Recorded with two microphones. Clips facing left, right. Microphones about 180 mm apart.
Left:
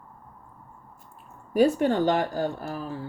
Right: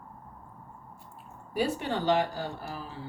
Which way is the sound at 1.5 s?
50° left (ahead or behind).